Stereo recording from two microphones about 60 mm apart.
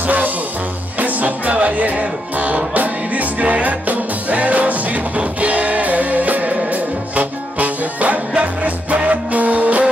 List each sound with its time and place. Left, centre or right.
0.0 s music: right